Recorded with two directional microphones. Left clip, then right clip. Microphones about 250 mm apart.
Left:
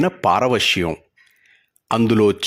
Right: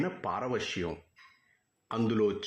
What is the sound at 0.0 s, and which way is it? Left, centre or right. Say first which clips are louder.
A man's voice: left 17 dB; left.